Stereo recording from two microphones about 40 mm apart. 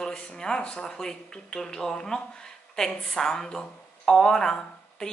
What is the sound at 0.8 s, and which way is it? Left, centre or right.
Speech, centre.